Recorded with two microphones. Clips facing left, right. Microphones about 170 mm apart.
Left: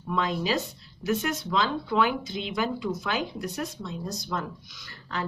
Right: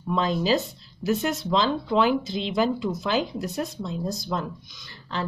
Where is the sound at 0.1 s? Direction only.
30° right (ahead or behind).